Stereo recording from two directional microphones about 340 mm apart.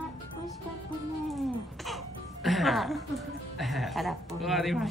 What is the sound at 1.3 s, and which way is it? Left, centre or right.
Speech, centre.